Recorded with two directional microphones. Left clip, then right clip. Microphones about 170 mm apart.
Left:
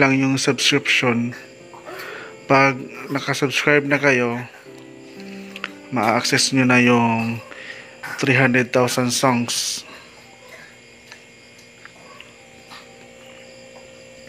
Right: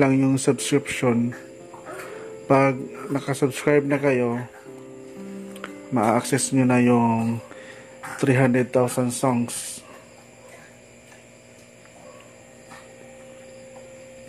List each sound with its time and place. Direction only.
0.0 s speech: 20° right (ahead or behind)
6.1 s speech: 20° right (ahead or behind)